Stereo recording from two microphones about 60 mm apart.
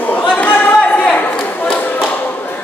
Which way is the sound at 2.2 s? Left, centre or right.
Left.